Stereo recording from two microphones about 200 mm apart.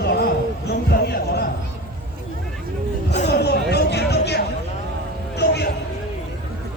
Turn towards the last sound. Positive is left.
turn(degrees=55)  # may be behind; listen again after turning